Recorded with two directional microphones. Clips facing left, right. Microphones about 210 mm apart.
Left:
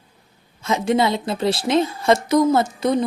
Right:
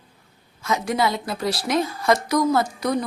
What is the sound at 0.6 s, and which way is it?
A woman's voice, 25° left (ahead or behind).